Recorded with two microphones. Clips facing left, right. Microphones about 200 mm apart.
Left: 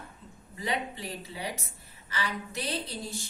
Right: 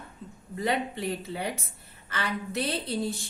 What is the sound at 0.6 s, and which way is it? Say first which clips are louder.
A woman's voice: right 5 dB; 55° right (ahead or behind).